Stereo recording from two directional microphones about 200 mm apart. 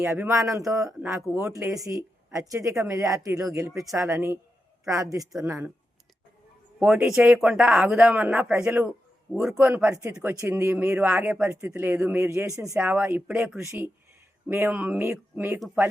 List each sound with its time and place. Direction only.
0.0 s speech: 15° right (ahead or behind)
6.7 s a man's voice: 5° right (ahead or behind)